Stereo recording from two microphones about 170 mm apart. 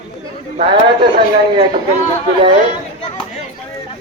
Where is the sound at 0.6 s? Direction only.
30° right (ahead or behind).